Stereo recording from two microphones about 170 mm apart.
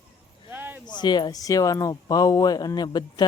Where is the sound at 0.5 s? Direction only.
10° right (ahead or behind).